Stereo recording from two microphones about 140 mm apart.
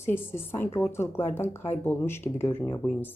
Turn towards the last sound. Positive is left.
turn(degrees=15)  # may be behind; listen again after turning